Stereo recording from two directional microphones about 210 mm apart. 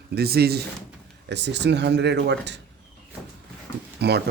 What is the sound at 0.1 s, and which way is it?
A man's voice, 50° right (ahead or behind).